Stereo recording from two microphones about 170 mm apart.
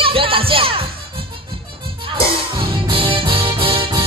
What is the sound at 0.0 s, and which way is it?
Music, 30° right (ahead or behind).